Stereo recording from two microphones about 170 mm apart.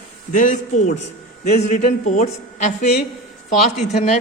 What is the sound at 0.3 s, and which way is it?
Speech, 50° left (ahead or behind).